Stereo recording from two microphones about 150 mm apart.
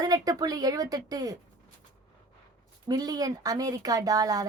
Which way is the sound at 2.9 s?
25° right (ahead or behind).